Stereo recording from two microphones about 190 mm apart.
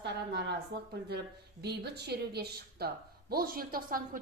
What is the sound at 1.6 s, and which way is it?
A woman's voice, 60° right (ahead or behind).